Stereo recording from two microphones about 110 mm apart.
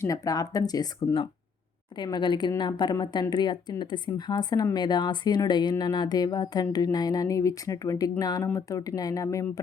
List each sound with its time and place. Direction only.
0.0 s a woman's voice: 30° left (ahead or behind)